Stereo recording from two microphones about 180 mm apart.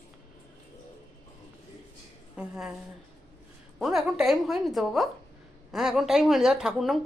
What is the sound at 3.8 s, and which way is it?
A woman's voice, centre (ahead or behind).